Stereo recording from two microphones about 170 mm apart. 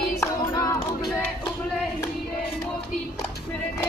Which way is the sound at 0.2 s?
20° left (ahead or behind).